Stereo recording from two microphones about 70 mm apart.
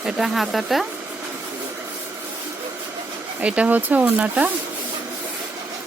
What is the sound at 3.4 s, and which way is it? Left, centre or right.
Speech, centre.